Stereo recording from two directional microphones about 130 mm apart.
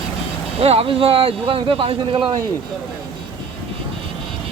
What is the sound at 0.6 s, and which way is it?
Speech, 50° right (ahead or behind).